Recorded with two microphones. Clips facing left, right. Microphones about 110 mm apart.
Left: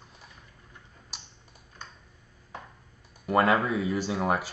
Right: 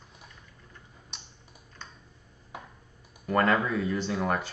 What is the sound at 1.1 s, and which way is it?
Typing, 5° left (ahead or behind).